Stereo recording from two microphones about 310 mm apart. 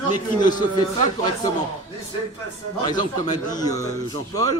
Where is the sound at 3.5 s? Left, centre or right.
Centre.